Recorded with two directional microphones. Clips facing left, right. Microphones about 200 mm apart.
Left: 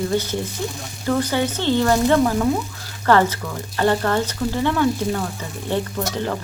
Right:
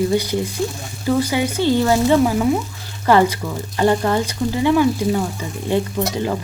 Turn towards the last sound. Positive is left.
turn(degrees=-10)  # may be behind; listen again after turning